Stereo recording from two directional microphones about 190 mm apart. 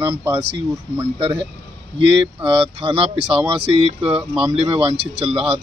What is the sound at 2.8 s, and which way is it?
Speech, 30° right (ahead or behind).